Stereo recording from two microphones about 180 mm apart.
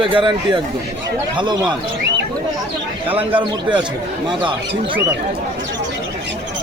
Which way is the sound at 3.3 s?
25° right (ahead or behind).